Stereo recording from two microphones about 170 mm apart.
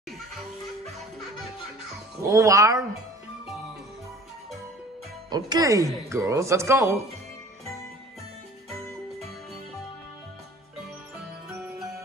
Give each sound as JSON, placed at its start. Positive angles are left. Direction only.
{"t": 2.2, "sound": "speech", "side_deg": -20}
{"t": 5.3, "sound": "speech", "side_deg": -20}